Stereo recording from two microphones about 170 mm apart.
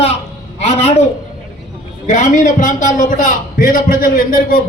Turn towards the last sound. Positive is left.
turn(degrees=55)  # may be behind; listen again after turning